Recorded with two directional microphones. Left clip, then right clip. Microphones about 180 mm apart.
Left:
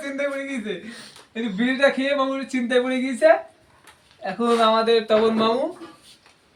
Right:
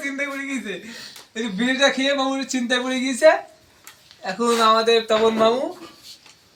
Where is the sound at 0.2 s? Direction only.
65° left (ahead or behind).